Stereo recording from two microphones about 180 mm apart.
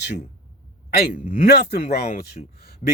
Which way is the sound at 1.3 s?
65° left (ahead or behind).